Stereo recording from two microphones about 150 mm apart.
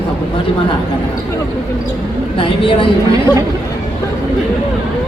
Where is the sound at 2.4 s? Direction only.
35° left (ahead or behind).